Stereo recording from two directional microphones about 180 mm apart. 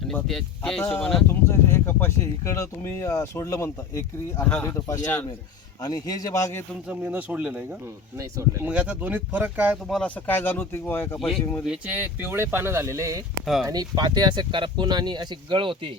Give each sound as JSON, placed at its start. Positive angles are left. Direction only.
{"t": 0.1, "sound": "speech", "side_deg": 5}
{"t": 5.8, "sound": "a man's voice", "side_deg": 20}
{"t": 6.8, "sound": "speech", "side_deg": -5}
{"t": 11.6, "sound": "speech", "side_deg": -5}
{"t": 13.4, "sound": "speech", "side_deg": 0}
{"t": 13.7, "sound": "speech", "side_deg": -20}